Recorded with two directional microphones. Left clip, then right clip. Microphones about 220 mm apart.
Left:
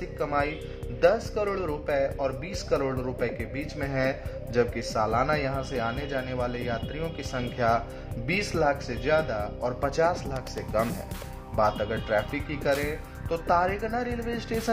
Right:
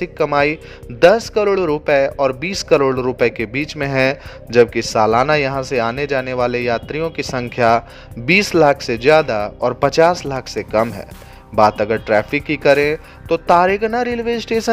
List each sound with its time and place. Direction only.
0.2 s speech: 35° right (ahead or behind)